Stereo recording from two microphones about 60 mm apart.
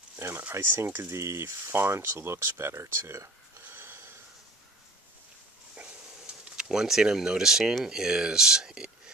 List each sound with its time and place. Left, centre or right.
0.4 s speech: right
3.6 s snort: right
5.9 s speech: centre